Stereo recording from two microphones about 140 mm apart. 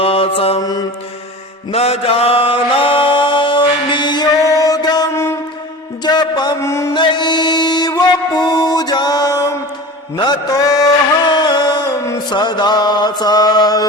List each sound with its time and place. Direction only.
0.0 s mantra: 45° left (ahead or behind)
0.6 s mantra: 25° left (ahead or behind)
1.7 s chant: 45° left (ahead or behind); by 5.4 s 20° left (ahead or behind)
6.0 s a sound: 30° left (ahead or behind)
6.9 s mantra: 35° left (ahead or behind)